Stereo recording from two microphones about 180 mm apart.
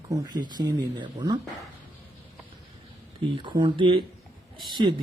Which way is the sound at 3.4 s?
25° right (ahead or behind).